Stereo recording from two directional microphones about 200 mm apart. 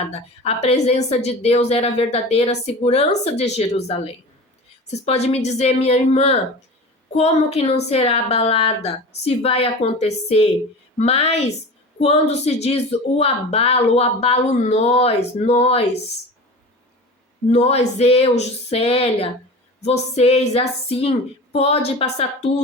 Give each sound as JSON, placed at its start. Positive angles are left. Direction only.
{"t": 0.0, "sound": "a woman's voice", "side_deg": 30}
{"t": 17.5, "sound": "a woman's voice", "side_deg": 30}